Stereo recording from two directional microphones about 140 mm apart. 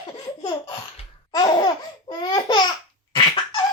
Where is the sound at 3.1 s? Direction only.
35° left (ahead or behind).